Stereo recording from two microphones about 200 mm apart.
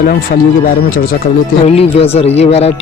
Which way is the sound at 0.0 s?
45° left (ahead or behind).